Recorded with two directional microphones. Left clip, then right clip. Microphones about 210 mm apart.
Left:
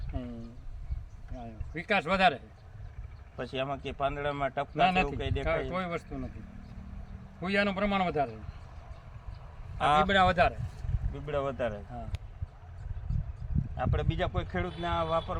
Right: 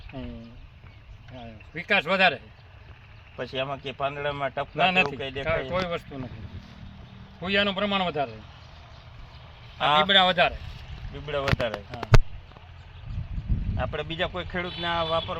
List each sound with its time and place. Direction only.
0.1 s speech: 10° right (ahead or behind)
1.4 s a man's voice: 10° right (ahead or behind)
7.4 s speech: 10° right (ahead or behind)
9.7 s a man's voice: 5° right (ahead or behind)
11.3 s speech: 5° right (ahead or behind)
13.7 s speech: 5° right (ahead or behind)